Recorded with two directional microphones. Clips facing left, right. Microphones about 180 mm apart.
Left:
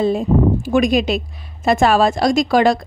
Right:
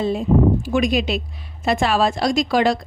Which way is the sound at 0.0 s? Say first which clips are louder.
Left 2 dB; 45° left (ahead or behind).